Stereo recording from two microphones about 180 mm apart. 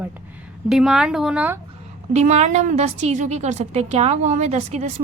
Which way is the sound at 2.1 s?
40° right (ahead or behind).